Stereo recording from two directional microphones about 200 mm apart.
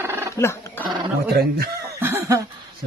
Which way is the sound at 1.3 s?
50° right (ahead or behind).